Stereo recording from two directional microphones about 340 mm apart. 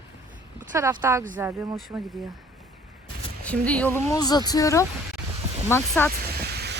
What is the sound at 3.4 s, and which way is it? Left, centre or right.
Speech, centre.